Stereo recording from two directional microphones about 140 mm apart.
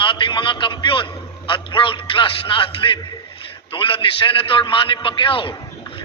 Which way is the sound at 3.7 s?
40° left (ahead or behind).